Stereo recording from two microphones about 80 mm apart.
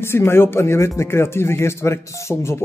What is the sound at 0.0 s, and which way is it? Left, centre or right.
A man's voice, left.